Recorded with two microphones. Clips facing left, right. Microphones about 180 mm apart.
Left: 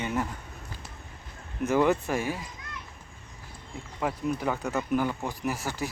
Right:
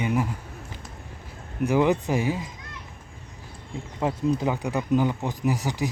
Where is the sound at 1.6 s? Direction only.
15° right (ahead or behind).